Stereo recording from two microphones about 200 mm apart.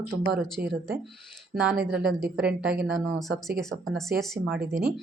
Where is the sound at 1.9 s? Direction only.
Centre (ahead or behind).